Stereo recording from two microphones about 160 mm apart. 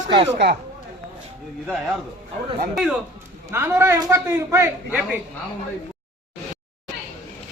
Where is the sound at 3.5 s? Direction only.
15° right (ahead or behind).